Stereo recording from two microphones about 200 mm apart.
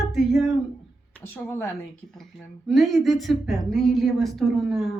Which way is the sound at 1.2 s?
10° left (ahead or behind).